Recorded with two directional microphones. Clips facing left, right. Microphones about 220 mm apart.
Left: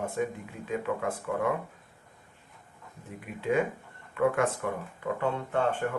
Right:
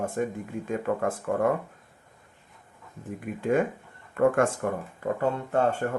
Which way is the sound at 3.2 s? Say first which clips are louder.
Right 3 dB; 45° right (ahead or behind).